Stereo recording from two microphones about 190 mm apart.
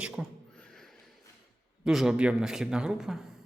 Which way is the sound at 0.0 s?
Centre (ahead or behind).